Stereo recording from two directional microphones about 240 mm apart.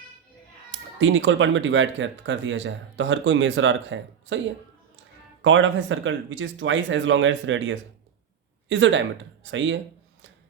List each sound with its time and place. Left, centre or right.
0.9 s speech: right
5.4 s speech: right